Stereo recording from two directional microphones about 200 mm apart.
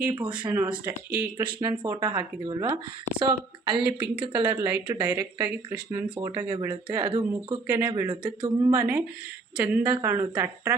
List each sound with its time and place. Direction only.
0.1 s speech: 25° right (ahead or behind)
0.4 s speech: 10° right (ahead or behind)
1.4 s speech: 25° right (ahead or behind)
3.8 s speech: 10° right (ahead or behind)
4.2 s speech: 25° right (ahead or behind)
4.4 s speech: 10° right (ahead or behind)
8.7 s speech: 5° right (ahead or behind)